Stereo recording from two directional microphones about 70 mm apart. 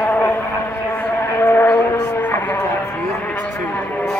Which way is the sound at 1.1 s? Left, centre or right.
Left.